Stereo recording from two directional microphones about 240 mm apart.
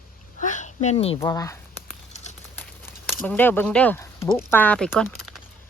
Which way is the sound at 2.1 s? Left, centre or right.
Left.